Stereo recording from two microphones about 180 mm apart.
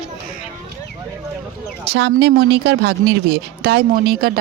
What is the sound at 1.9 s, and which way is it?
Speech, 75° right (ahead or behind).